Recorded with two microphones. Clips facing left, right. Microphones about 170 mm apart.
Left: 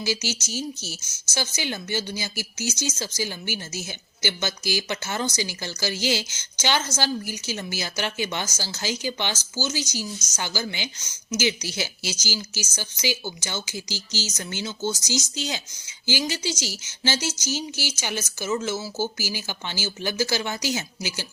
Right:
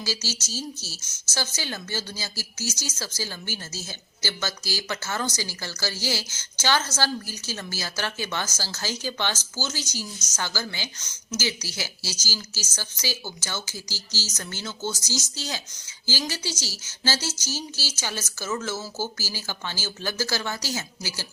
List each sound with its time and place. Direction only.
0.0 s speech: 20° left (ahead or behind)